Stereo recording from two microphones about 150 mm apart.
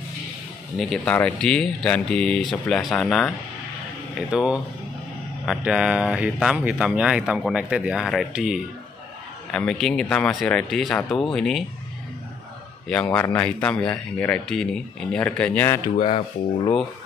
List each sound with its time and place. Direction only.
0.7 s speech: 5° left (ahead or behind)
4.3 s speech: 5° right (ahead or behind)
5.6 s speech: 5° right (ahead or behind)
11.0 s speech: 15° left (ahead or behind)
11.3 s speech: centre (ahead or behind)
12.8 s speech: 5° left (ahead or behind)